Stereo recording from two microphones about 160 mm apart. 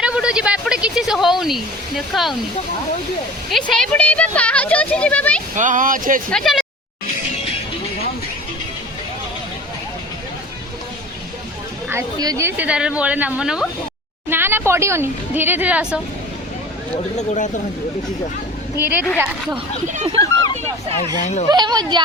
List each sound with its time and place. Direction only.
0.0 s speech: 5° right (ahead or behind)
3.7 s a woman's voice: 5° left (ahead or behind)
5.5 s speech: 55° right (ahead or behind)
6.3 s speech: centre (ahead or behind)
11.9 s speech: 20° right (ahead or behind)
17.2 s speech: 50° left (ahead or behind)
18.8 s speech: 10° right (ahead or behind)
19.9 s speech: 45° right (ahead or behind)
21.5 s speech: 25° right (ahead or behind)